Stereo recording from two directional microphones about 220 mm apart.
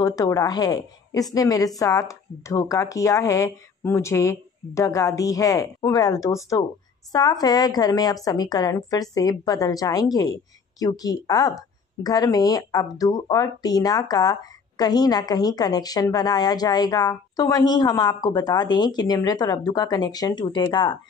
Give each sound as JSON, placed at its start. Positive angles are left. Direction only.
{"t": 0.0, "sound": "a woman's voice", "side_deg": 15}